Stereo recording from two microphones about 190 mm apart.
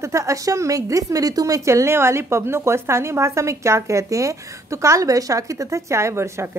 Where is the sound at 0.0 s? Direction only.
15° right (ahead or behind).